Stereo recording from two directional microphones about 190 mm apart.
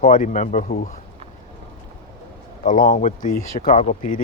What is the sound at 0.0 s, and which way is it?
Speech, 40° left (ahead or behind).